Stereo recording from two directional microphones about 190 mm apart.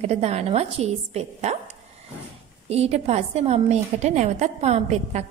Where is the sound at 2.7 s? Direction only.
35° right (ahead or behind).